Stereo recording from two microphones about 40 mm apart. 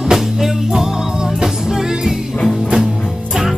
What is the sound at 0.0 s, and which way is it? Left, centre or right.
Music, centre.